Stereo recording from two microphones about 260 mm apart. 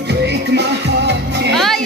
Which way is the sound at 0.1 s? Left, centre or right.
Right.